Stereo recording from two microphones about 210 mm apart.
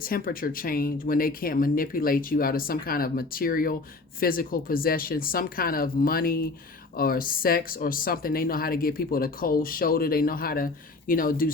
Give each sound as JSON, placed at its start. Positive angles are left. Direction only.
{"t": 0.0, "sound": "speech", "side_deg": 45}